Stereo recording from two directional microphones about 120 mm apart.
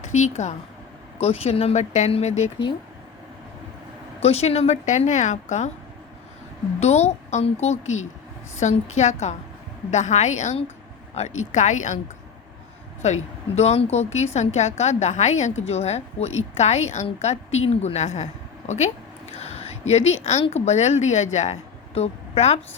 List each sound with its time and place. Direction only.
0.1 s speech: 80° left
1.2 s a woman's voice: 60° left (ahead or behind)
4.2 s a woman's voice: 60° left (ahead or behind); by 5.7 s 80° left
6.7 s a woman's voice: 65° left (ahead or behind); by 11.9 s 85° left
13.0 s a woman's voice: 70° left (ahead or behind)
18.7 s a sound: 65° left (ahead or behind)
20.5 s speech: 70° left (ahead or behind)